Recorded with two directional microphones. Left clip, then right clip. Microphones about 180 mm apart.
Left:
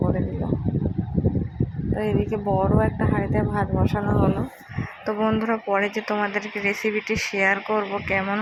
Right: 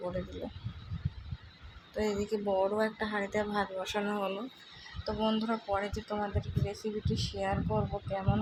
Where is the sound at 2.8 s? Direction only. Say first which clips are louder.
Left 8 dB; 15° left (ahead or behind).